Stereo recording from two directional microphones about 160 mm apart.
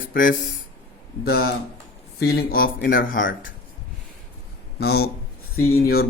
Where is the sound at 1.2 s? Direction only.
75° left (ahead or behind).